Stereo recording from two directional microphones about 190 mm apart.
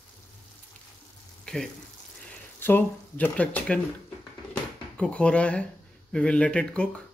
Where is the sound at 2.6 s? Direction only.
10° left (ahead or behind).